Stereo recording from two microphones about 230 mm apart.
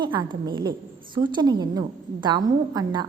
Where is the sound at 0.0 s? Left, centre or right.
Centre.